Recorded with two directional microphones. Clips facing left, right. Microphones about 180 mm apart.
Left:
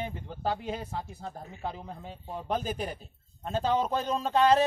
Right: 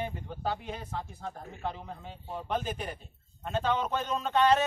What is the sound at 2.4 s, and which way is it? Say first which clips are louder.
Speech: left 2 dB; 35° left (ahead or behind).